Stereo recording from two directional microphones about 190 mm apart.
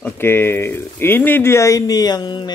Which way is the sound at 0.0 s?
10° left (ahead or behind).